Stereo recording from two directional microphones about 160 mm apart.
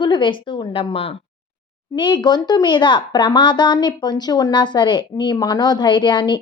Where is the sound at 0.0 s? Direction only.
30° left (ahead or behind).